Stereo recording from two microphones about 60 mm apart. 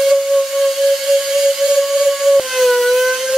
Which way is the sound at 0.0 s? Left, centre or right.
Centre.